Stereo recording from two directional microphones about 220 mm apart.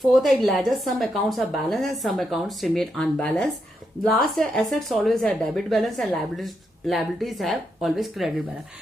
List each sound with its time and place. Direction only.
0.0 s a woman's voice: centre (ahead or behind)